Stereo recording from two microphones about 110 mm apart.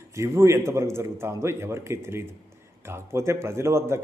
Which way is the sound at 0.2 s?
25° right (ahead or behind).